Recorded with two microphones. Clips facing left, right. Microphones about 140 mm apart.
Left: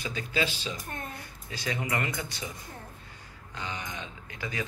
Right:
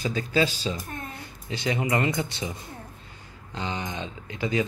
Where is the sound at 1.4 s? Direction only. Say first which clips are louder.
Right 6 dB; 20° right (ahead or behind).